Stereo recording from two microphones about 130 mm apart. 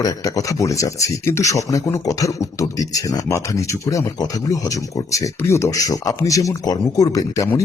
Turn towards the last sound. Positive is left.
turn(degrees=25)  # may be behind; listen again after turning